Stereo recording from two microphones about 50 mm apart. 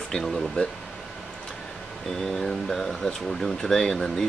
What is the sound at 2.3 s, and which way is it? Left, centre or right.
Speech, centre.